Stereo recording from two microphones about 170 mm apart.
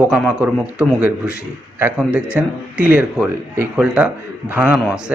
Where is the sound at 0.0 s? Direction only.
5° right (ahead or behind).